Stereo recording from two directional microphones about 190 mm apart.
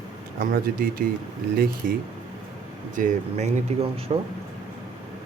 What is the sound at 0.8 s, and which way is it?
Speech, 50° right (ahead or behind).